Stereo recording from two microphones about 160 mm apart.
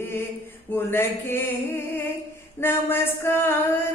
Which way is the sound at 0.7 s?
15° left (ahead or behind).